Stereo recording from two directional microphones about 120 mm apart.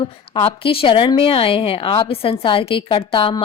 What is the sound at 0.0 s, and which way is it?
A woman's voice, 45° left (ahead or behind).